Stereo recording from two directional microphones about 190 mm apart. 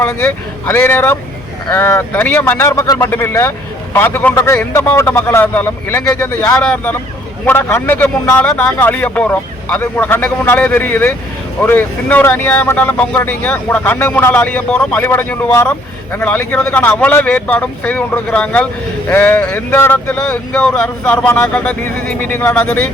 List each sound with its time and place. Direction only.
0.7 s speech: 10° left (ahead or behind)